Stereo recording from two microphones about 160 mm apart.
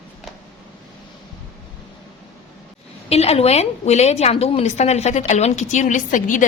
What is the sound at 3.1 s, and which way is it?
A woman's voice, 40° left (ahead or behind).